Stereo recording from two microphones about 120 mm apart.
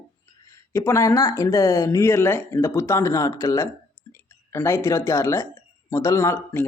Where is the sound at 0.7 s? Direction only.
25° left (ahead or behind).